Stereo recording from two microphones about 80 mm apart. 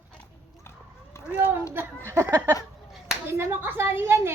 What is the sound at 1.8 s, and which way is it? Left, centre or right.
A child's voice, right.